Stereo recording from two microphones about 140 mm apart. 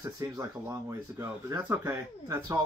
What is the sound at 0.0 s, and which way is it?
Speech, 20° right (ahead or behind).